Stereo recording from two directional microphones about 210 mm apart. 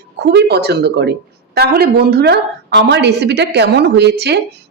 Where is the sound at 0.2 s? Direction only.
50° right (ahead or behind).